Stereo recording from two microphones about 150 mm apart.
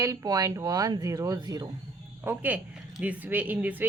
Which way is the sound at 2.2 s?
10° right (ahead or behind).